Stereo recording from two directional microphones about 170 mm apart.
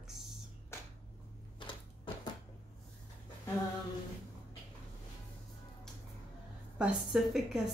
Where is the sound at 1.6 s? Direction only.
30° left (ahead or behind).